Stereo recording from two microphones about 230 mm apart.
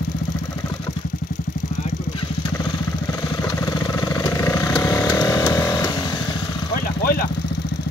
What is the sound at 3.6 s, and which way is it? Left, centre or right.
Vehicle, centre.